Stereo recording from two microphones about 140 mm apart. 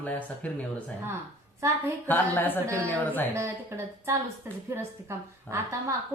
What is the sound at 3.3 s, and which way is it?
A woman's voice, 20° right (ahead or behind).